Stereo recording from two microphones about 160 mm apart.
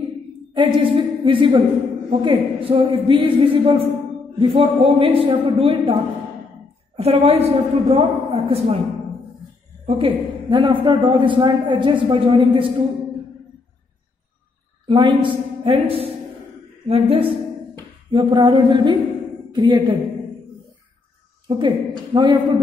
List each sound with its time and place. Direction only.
0.5 s a woman's voice: 30° right (ahead or behind)
7.0 s a man's voice: 40° right (ahead or behind)
9.8 s a man's voice: 35° right (ahead or behind)
14.9 s a man's voice: 30° right (ahead or behind)
21.5 s a woman's voice: 30° right (ahead or behind)